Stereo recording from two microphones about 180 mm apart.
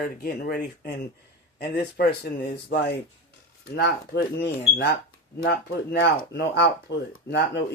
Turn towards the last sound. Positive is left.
turn(degrees=70)  # may be behind; listen again after turning